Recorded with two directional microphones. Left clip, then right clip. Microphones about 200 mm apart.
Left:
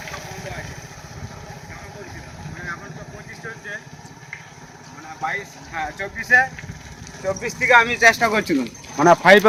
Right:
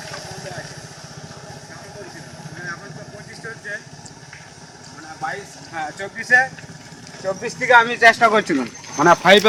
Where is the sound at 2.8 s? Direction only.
35° right (ahead or behind).